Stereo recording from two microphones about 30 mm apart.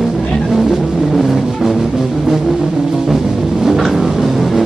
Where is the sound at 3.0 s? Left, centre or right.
Centre.